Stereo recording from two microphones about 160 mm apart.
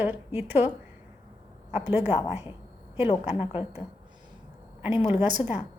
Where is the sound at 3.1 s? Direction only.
40° left (ahead or behind).